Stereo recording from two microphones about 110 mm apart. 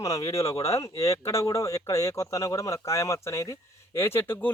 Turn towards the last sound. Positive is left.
turn(degrees=20)  # may be behind; listen again after turning